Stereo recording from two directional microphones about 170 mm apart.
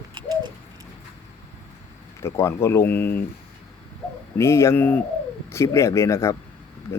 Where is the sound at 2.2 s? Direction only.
15° left (ahead or behind).